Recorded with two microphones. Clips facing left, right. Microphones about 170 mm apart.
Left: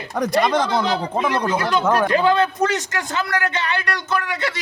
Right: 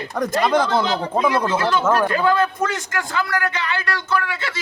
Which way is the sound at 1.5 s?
15° left (ahead or behind).